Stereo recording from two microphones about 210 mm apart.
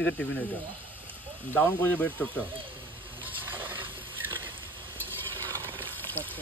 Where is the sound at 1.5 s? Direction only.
10° left (ahead or behind).